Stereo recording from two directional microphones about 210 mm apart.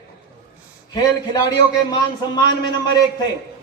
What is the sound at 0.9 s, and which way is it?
Speech, 20° left (ahead or behind).